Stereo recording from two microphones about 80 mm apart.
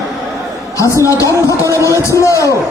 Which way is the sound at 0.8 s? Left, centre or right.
Left.